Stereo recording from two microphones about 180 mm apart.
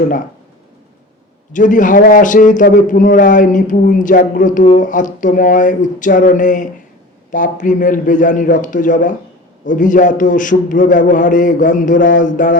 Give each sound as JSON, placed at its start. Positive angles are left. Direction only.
{"t": 1.5, "sound": "a man's voice", "side_deg": 45}